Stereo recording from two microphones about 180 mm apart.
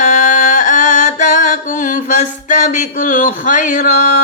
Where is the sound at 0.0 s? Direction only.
45° left (ahead or behind).